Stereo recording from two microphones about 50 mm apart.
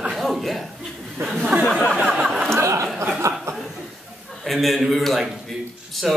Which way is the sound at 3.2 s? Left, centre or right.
Right.